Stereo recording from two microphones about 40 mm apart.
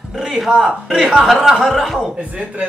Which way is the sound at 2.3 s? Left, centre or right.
Right.